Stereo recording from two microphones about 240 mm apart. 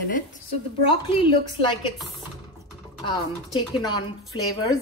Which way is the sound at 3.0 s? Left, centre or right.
Centre.